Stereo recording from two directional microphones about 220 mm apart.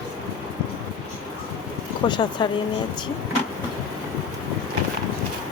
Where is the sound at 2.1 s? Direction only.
20° left (ahead or behind).